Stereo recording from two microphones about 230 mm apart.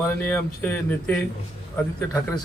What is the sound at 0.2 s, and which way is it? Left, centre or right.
Speech, centre.